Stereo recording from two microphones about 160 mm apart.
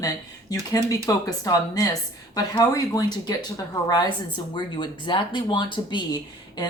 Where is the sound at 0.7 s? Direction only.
20° left (ahead or behind).